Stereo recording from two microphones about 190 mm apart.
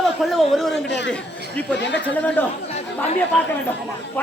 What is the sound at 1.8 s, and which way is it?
Speech, 65° left (ahead or behind).